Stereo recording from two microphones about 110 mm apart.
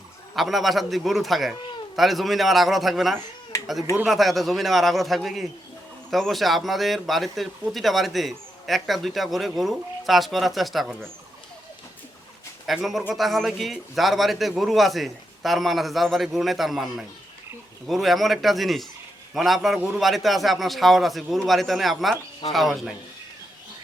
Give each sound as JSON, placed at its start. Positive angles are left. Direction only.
{"t": 0.3, "sound": "a man's voice", "side_deg": 0}
{"t": 3.5, "sound": "bleat", "side_deg": 30}
{"t": 4.0, "sound": "a man's voice", "side_deg": 0}
{"t": 12.6, "sound": "a man's voice", "side_deg": 0}